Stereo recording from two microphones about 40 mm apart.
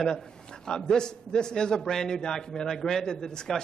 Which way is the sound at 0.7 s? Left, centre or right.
Centre.